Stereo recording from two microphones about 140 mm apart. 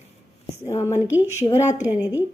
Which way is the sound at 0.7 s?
20° left (ahead or behind).